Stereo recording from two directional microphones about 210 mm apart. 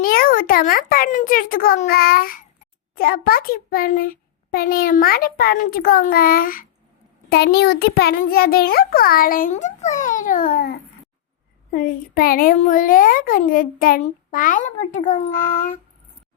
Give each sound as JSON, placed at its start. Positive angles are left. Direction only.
{"t": 0.0, "sound": "a child's voice", "side_deg": 45}